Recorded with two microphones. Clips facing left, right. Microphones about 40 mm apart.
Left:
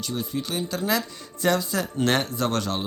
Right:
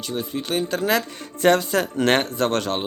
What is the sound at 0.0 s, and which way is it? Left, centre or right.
Speech, right.